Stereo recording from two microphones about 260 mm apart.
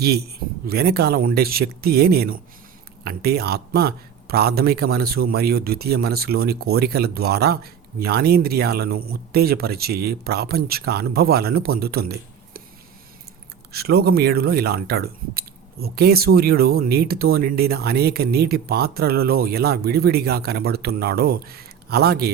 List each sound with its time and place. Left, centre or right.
0.0 s a man's voice: right
13.7 s a man's voice: right